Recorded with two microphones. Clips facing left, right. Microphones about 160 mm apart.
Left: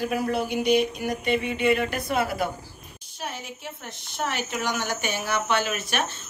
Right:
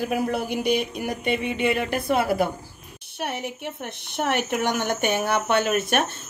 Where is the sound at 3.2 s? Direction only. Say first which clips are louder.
Right 6 dB; 65° right (ahead or behind).